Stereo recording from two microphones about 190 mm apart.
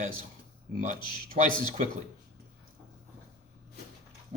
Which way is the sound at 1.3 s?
40° right (ahead or behind).